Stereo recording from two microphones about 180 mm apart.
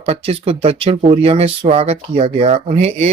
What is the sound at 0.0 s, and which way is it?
Speech, 30° right (ahead or behind).